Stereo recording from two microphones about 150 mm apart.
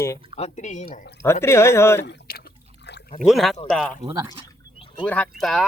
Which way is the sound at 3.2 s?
Centre (ahead or behind).